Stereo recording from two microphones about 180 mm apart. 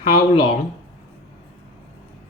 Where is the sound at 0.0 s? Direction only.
30° left (ahead or behind).